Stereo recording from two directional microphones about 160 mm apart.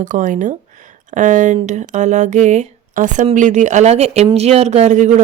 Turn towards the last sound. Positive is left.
turn(degrees=-50)  # may be behind; listen again after turning